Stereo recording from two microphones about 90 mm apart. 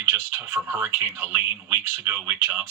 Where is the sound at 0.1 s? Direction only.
25° right (ahead or behind).